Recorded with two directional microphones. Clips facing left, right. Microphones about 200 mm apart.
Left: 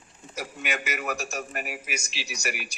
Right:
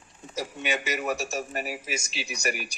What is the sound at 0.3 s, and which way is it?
A man's voice, 25° right (ahead or behind).